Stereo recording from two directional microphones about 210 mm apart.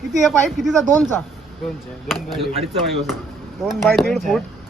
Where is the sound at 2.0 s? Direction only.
Centre (ahead or behind).